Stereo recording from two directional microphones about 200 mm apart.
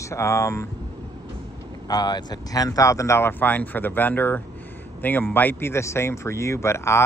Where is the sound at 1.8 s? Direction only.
20° left (ahead or behind).